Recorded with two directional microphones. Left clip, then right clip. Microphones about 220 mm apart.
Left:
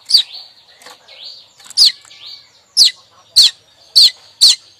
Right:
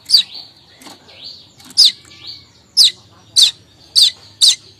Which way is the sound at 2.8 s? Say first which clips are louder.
Even; 20° left (ahead or behind).